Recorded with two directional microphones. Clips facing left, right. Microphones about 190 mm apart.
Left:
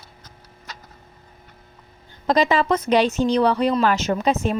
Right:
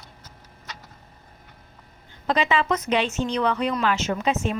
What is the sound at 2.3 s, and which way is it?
Speech, 40° left (ahead or behind).